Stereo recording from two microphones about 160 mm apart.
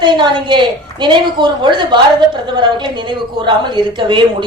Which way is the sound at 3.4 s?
30° right (ahead or behind).